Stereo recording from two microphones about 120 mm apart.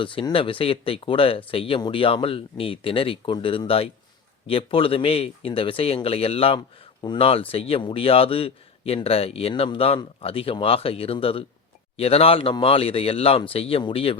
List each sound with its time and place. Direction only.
0.0 s speech: 45° left (ahead or behind)